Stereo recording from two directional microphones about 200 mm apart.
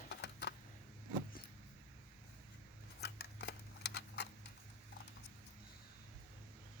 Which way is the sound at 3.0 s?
55° left (ahead or behind).